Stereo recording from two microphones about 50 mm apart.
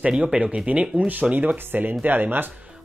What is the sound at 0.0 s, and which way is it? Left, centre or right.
Speech, centre.